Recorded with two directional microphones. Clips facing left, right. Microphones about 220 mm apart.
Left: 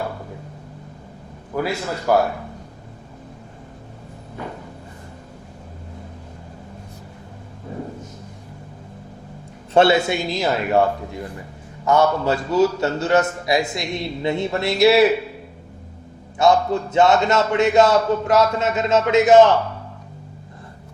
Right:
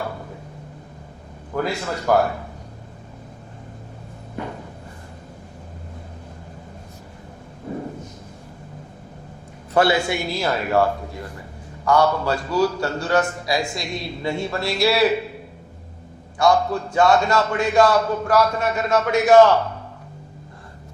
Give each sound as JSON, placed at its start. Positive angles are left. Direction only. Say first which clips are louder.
{"t": 1.5, "sound": "a man's voice", "louder": "left 1 dB", "side_deg": 10}
{"t": 9.7, "sound": "a man's voice", "louder": "left 3 dB", "side_deg": 25}
{"t": 11.9, "sound": "a man's voice", "louder": "left 1 dB", "side_deg": 20}
{"t": 16.4, "sound": "a man's voice", "louder": "left 2 dB", "side_deg": 25}